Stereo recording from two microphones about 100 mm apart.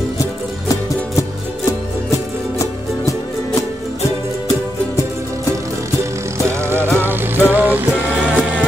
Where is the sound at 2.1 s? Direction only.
30° left (ahead or behind).